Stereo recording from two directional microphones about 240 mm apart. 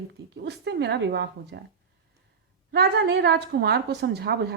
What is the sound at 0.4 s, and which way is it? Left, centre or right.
A woman's voice, right.